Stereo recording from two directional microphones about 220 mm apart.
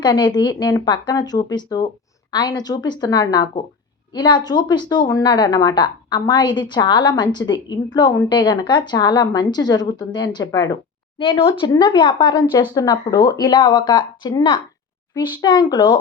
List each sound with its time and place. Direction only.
0.0 s a woman's voice: 20° left (ahead or behind)